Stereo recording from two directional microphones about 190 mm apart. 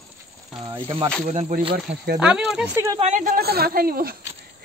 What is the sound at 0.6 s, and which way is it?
Speech, 25° right (ahead or behind).